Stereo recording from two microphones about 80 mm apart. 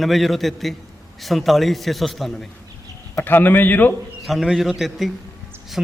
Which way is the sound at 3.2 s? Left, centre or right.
Left.